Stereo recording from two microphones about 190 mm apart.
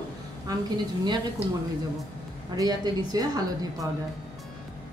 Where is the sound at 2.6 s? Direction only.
20° right (ahead or behind).